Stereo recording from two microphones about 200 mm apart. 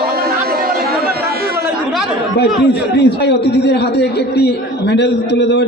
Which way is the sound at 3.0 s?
60° left (ahead or behind).